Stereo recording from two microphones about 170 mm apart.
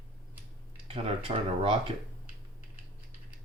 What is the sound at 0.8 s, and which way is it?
Speech, 30° right (ahead or behind).